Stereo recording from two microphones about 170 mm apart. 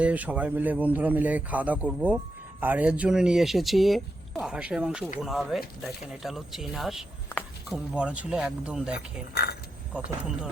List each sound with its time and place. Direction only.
0.0 s speech: 10° right (ahead or behind)
9.3 s chink: 70° left (ahead or behind)
9.9 s speech: 5° right (ahead or behind)